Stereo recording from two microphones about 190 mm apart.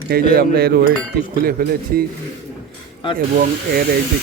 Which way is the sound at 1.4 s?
50° right (ahead or behind).